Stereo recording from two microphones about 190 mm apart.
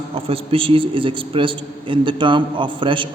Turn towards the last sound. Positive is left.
turn(degrees=-25)  # may be behind; listen again after turning